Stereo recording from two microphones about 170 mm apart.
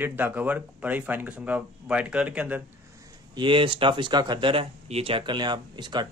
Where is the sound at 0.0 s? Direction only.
10° right (ahead or behind).